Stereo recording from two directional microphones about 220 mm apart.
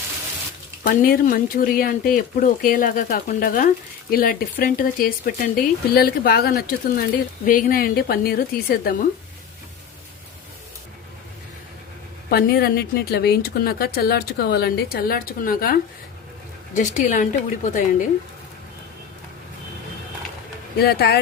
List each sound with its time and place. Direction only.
0.9 s a woman's voice: 40° left (ahead or behind)
12.3 s a woman's voice: 45° left (ahead or behind)
20.7 s a woman's voice: 45° left (ahead or behind)